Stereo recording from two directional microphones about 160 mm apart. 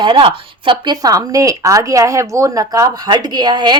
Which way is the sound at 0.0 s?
30° right (ahead or behind).